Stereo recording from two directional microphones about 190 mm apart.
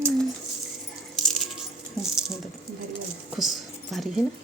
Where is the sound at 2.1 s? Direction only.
Centre (ahead or behind).